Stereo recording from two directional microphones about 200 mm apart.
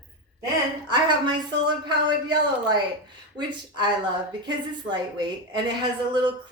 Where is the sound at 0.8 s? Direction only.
20° right (ahead or behind).